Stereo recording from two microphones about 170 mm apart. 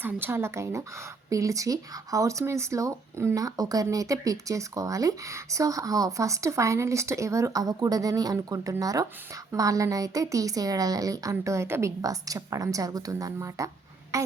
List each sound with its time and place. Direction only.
0.0 s speech: 15° right (ahead or behind)